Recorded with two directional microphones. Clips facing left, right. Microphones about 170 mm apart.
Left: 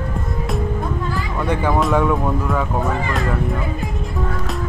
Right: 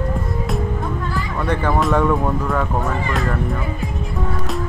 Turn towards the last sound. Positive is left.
turn(degrees=0)  # may be behind; listen again after turning